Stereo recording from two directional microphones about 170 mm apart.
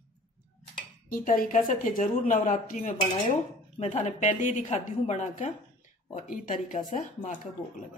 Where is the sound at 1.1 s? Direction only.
55° left (ahead or behind).